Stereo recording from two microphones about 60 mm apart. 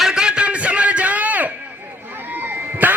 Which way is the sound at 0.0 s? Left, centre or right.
Centre.